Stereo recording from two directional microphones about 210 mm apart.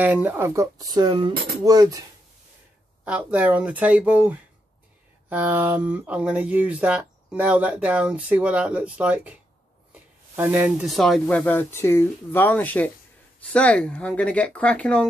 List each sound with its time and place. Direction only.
0.0 s speech: 10° right (ahead or behind)
3.1 s speech: 5° right (ahead or behind)